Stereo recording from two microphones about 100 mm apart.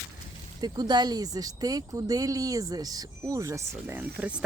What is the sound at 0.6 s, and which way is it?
Speech, 45° right (ahead or behind).